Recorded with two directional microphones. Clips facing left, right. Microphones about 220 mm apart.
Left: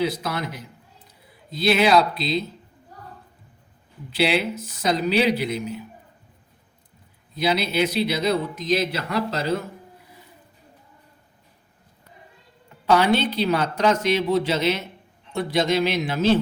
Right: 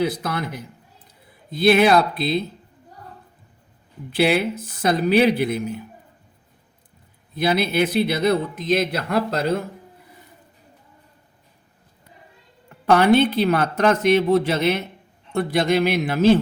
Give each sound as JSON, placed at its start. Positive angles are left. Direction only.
{"t": 0.0, "sound": "speech", "side_deg": -55}
{"t": 4.1, "sound": "speech", "side_deg": -55}
{"t": 7.3, "sound": "speech", "side_deg": -55}
{"t": 12.6, "sound": "speech", "side_deg": -55}